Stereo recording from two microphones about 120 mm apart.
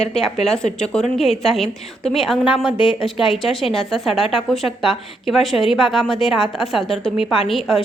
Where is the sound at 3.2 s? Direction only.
Centre (ahead or behind).